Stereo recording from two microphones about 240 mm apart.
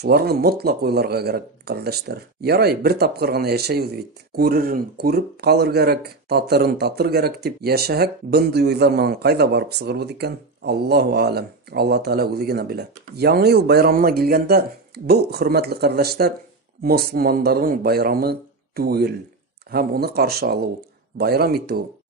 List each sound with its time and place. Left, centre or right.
0.0 s speech: right